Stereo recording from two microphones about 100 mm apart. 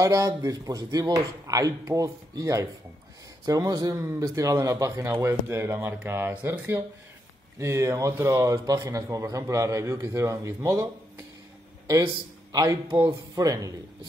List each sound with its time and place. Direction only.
0.0 s speech: 35° right (ahead or behind)
13.1 s speech: 35° right (ahead or behind)